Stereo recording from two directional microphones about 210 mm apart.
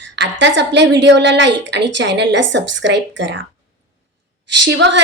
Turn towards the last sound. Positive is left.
turn(degrees=-60)  # may be behind; listen again after turning